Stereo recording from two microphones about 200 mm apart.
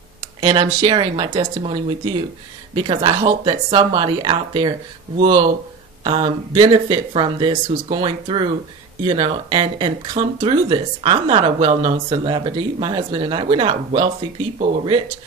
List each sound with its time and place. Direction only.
0.4 s speech: 25° right (ahead or behind)